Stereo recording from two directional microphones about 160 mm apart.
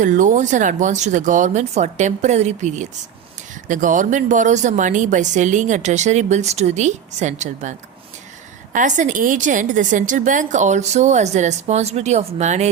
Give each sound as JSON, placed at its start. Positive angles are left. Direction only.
{"t": 0.0, "sound": "speech", "side_deg": -50}